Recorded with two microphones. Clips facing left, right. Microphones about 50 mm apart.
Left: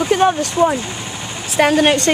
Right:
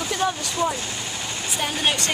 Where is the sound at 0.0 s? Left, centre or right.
Left.